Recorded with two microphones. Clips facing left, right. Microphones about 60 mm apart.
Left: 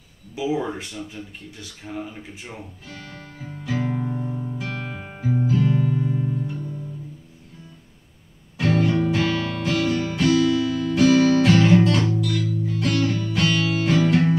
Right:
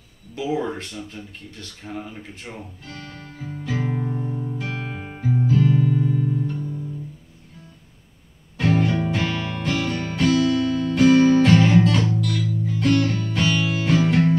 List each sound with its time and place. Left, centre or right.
0.4 s speech: centre
3.5 s music: centre
4.7 s guitar: centre
8.5 s music: centre